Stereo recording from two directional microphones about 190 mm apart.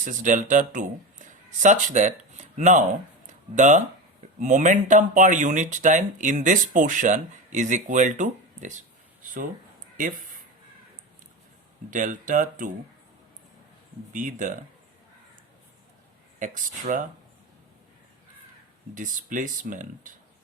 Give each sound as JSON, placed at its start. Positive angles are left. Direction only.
{"t": 0.0, "sound": "speech", "side_deg": -45}
{"t": 3.2, "sound": "a sound", "side_deg": -40}
{"t": 4.4, "sound": "speech", "side_deg": -40}
{"t": 10.0, "sound": "speech", "side_deg": -45}
{"t": 11.9, "sound": "speech", "side_deg": -45}
{"t": 14.1, "sound": "speech", "side_deg": -45}
{"t": 16.4, "sound": "speech", "side_deg": -45}
{"t": 18.9, "sound": "speech", "side_deg": -45}